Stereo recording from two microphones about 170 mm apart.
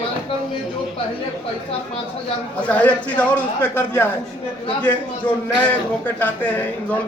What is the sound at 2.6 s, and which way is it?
A man's voice, 10° left (ahead or behind).